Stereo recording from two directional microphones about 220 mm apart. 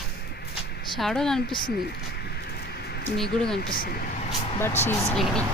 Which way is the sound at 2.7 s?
45° left (ahead or behind).